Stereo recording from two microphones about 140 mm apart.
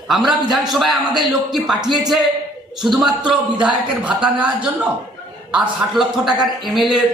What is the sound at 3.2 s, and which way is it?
Speech, 35° right (ahead or behind).